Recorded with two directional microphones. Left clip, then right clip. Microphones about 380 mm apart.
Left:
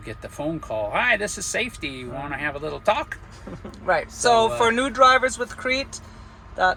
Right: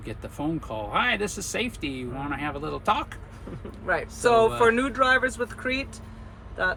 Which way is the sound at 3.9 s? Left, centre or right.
Centre.